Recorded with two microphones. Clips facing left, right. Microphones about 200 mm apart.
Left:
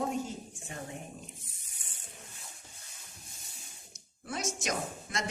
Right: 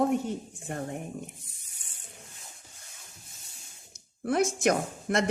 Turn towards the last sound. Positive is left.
turn(degrees=-60)  # may be behind; listen again after turning